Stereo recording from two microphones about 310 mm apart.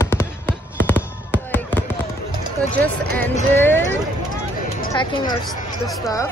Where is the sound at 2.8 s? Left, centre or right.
Centre.